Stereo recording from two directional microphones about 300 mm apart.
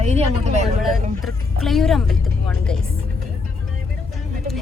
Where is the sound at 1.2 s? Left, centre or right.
Centre.